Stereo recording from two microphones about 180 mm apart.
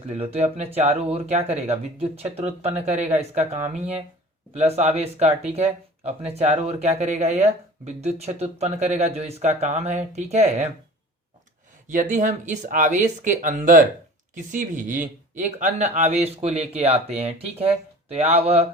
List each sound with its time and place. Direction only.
0.1 s speech: 35° right (ahead or behind)
11.9 s speech: 45° right (ahead or behind)